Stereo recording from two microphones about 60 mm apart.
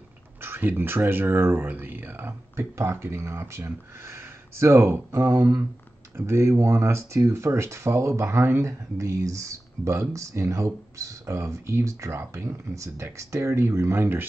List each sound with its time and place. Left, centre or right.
0.4 s speech: right